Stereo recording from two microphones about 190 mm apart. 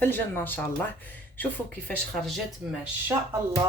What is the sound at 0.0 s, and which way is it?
Speech, 10° left (ahead or behind).